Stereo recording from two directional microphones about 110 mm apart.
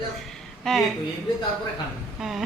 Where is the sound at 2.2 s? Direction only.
5° right (ahead or behind).